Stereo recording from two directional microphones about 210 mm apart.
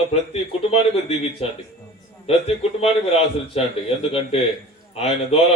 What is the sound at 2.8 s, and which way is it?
Speech, 30° left (ahead or behind).